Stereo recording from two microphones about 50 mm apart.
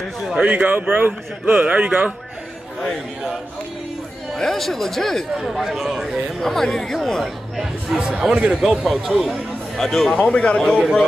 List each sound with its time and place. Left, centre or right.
0.4 s speech: right
4.4 s speech: centre
5.4 s speech: centre
6.4 s speech: centre
7.9 s a man's voice: centre
8.5 s speech: centre
10.1 s a man's voice: left